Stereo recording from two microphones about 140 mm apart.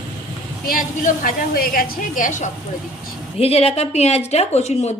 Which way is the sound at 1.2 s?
90° left.